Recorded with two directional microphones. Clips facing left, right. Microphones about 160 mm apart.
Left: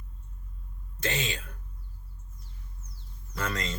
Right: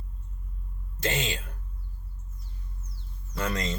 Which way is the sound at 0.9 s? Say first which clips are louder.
Right 2 dB; 25° right (ahead or behind).